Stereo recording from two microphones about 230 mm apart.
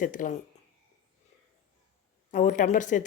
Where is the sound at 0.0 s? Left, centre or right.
Left.